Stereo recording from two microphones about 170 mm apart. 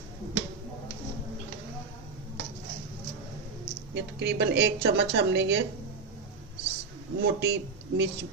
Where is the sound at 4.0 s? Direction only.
85° right.